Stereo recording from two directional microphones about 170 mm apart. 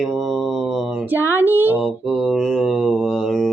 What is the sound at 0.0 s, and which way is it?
Mantra, centre (ahead or behind).